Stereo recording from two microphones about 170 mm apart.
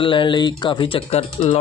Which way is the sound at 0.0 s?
30° left (ahead or behind).